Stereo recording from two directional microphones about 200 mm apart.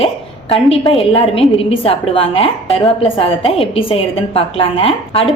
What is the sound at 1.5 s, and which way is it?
A woman's voice, 30° left (ahead or behind).